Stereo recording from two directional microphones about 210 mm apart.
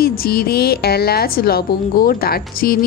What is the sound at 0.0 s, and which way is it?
A woman's voice, 45° left (ahead or behind).